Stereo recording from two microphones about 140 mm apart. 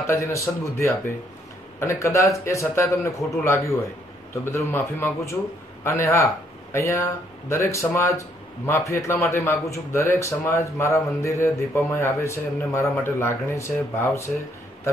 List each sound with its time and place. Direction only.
0.0 s speech: 20° left (ahead or behind)